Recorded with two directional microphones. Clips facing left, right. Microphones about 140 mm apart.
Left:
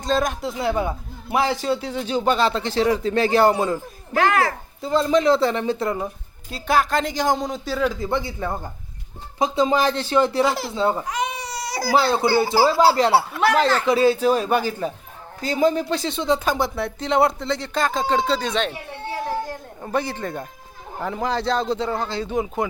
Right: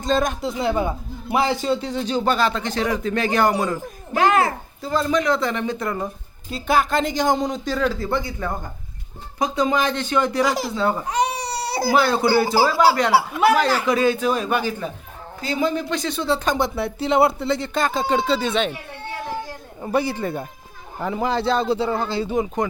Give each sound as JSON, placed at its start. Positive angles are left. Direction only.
{"t": 0.0, "sound": "speech", "side_deg": 0}
{"t": 2.4, "sound": "speech", "side_deg": 30}
{"t": 4.1, "sound": "a child's voice", "side_deg": -20}
{"t": 4.8, "sound": "speech", "side_deg": 25}
{"t": 6.5, "sound": "speech", "side_deg": 0}
{"t": 7.9, "sound": "speech", "side_deg": 20}
{"t": 11.1, "sound": "baby cry", "side_deg": -35}
{"t": 11.9, "sound": "speech", "side_deg": 25}
{"t": 12.7, "sound": "speech", "side_deg": -15}
{"t": 13.8, "sound": "speech", "side_deg": 30}
{"t": 16.4, "sound": "speech", "side_deg": 5}
{"t": 18.7, "sound": "children playing", "side_deg": 35}
{"t": 19.8, "sound": "speech", "side_deg": -5}